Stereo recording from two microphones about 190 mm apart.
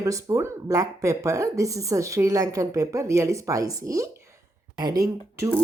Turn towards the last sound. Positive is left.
turn(degrees=-15)  # may be behind; listen again after turning